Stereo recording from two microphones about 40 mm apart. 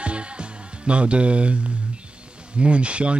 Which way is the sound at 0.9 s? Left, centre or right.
Right.